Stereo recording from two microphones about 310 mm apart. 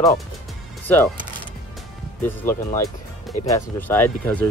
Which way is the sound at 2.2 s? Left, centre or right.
Centre.